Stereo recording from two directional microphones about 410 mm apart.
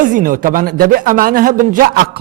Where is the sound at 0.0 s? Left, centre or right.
Centre.